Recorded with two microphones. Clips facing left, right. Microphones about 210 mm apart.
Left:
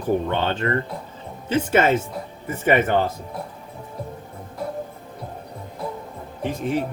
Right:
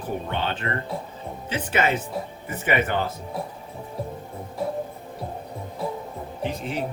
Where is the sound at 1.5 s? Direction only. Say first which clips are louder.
Left 6 dB; 50° left (ahead or behind).